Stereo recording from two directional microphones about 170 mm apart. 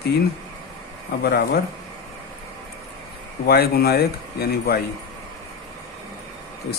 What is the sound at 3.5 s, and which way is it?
Speech, 65° left (ahead or behind).